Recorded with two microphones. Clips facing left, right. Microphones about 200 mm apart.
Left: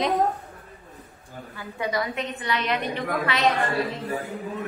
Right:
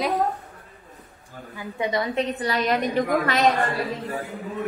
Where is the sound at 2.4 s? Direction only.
40° right (ahead or behind).